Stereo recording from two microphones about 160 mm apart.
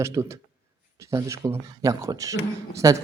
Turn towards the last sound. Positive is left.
turn(degrees=-20)  # may be behind; listen again after turning